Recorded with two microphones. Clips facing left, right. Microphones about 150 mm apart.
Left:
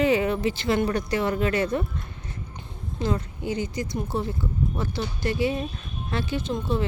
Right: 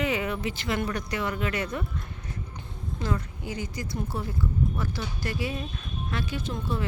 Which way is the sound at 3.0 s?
25° left (ahead or behind).